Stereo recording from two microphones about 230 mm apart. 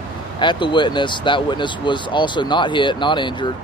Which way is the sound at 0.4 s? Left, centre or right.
Centre.